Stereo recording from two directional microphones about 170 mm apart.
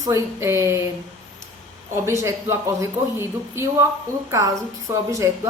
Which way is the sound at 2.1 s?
15° right (ahead or behind).